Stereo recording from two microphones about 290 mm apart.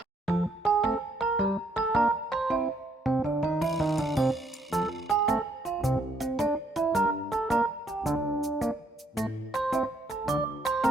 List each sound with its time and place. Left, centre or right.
0.3 s music: centre